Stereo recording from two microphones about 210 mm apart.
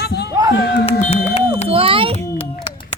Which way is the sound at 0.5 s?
55° left (ahead or behind).